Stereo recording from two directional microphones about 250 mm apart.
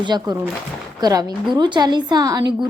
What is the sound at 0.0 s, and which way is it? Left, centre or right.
Speech, centre.